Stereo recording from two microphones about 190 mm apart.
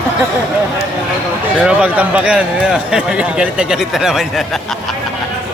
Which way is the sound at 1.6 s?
5° right (ahead or behind).